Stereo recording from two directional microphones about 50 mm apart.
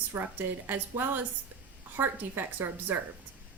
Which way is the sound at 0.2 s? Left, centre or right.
Right.